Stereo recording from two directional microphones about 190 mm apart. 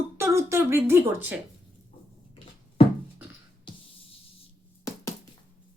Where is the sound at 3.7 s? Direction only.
25° left (ahead or behind).